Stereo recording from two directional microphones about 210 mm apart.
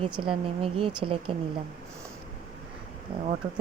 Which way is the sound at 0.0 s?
25° right (ahead or behind).